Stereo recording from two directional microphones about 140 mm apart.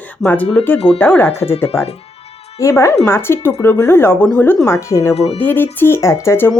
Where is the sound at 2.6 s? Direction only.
20° left (ahead or behind).